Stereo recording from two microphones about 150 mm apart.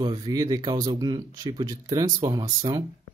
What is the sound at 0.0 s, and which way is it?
Speech, 25° right (ahead or behind).